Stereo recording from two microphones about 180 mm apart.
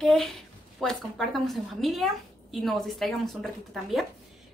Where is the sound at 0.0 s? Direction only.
Centre (ahead or behind).